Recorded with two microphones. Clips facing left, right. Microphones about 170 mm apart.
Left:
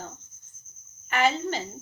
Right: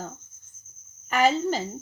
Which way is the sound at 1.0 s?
40° right (ahead or behind).